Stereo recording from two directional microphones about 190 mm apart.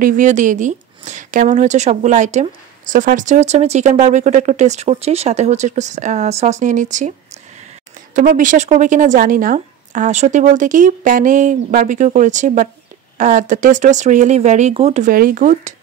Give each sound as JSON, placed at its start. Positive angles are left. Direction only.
{"t": 0.0, "sound": "speech", "side_deg": -40}